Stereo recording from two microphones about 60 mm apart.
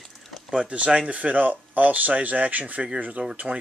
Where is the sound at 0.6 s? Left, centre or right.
Centre.